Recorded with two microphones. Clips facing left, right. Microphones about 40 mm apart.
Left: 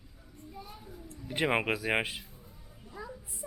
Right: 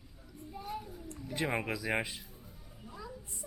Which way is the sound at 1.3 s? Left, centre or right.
Left.